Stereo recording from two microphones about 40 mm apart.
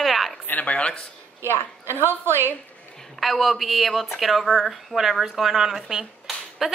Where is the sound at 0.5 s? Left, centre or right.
Left.